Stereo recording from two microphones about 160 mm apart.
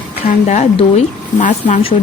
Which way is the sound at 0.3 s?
45° left (ahead or behind).